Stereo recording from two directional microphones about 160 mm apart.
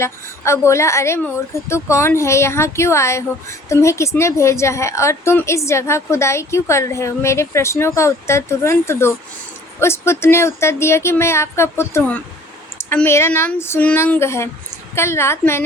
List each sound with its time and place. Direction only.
0.0 s a woman's voice: 15° left (ahead or behind)